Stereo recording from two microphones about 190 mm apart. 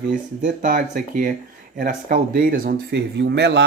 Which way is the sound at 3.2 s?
60° right (ahead or behind).